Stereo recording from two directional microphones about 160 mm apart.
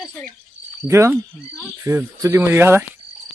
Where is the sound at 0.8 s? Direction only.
15° right (ahead or behind).